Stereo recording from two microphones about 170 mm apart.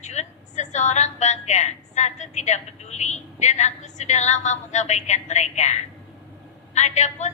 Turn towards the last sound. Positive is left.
turn(degrees=45)  # may be behind; listen again after turning